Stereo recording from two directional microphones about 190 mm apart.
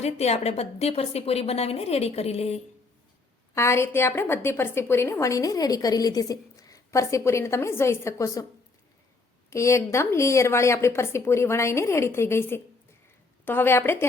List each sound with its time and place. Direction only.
0.0 s a woman's voice: 35° left (ahead or behind)
3.5 s a woman's voice: 15° left (ahead or behind)
9.5 s a woman's voice: 15° left (ahead or behind)